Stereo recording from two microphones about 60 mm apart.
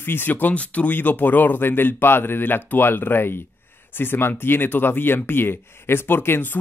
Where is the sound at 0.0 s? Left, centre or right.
Left.